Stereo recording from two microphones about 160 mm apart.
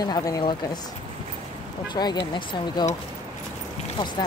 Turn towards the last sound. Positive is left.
turn(degrees=30)  # may be behind; listen again after turning